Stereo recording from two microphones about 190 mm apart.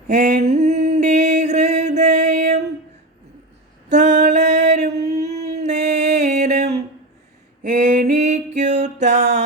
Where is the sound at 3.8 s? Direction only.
40° right (ahead or behind).